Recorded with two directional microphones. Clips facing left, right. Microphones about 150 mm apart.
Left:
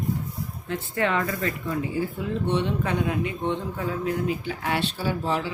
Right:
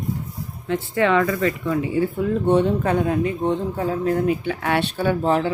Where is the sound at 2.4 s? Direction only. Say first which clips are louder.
Right 7 dB; 45° right (ahead or behind).